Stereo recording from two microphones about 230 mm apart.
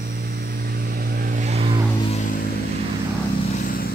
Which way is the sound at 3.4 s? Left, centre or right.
Left.